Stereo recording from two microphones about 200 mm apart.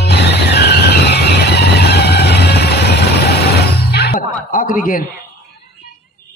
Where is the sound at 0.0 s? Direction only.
55° left (ahead or behind).